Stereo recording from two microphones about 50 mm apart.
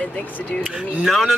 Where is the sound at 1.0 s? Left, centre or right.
Centre.